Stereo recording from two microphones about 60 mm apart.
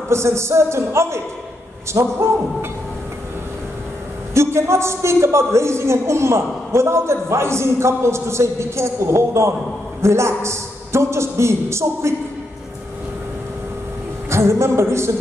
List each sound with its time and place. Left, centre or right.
0.1 s a man's voice: right
2.0 s a man's voice: right
4.3 s a man's voice: right
14.3 s music: right